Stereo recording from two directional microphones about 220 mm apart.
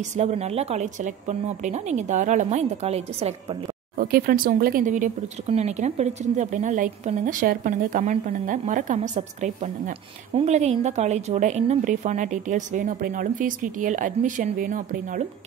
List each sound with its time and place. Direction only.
0.2 s speech: 30° right (ahead or behind)
4.0 s speech: 40° right (ahead or behind)